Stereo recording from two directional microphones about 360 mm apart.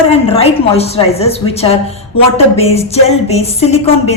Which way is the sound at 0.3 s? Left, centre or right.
Centre.